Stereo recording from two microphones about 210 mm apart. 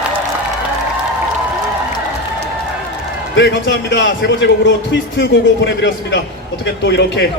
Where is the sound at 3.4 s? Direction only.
55° left (ahead or behind).